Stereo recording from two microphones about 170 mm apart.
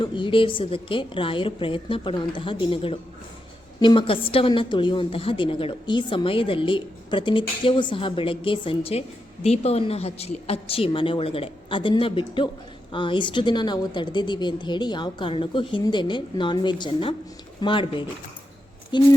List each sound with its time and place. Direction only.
0.0 s a woman's voice: 30° left (ahead or behind)